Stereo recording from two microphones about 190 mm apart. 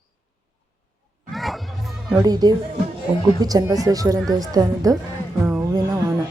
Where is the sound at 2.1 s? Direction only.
20° right (ahead or behind).